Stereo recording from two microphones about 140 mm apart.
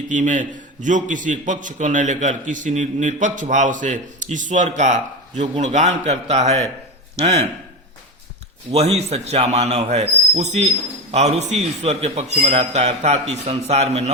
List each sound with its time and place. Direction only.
0.1 s a man's voice: 60° right (ahead or behind)
8.7 s a man's voice: 50° right (ahead or behind)